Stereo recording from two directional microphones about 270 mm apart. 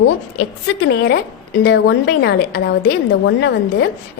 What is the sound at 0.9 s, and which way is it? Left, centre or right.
A woman's voice, left.